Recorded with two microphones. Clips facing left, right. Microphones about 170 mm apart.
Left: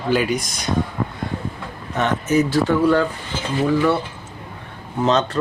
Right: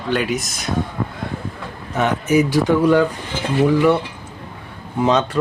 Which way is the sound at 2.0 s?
10° right (ahead or behind).